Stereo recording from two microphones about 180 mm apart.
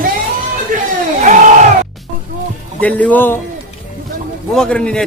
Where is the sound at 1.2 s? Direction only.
45° right (ahead or behind).